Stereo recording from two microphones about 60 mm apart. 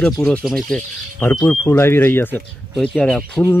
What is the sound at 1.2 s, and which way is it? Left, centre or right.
Speech, left.